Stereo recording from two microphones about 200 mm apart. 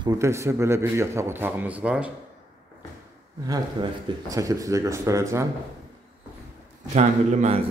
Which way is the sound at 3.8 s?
25° right (ahead or behind).